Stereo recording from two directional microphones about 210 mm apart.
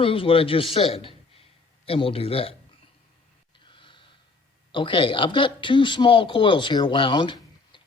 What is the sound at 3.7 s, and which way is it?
Gasp, 25° left (ahead or behind).